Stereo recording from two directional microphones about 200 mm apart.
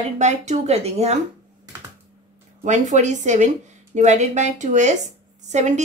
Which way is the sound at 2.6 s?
35° right (ahead or behind).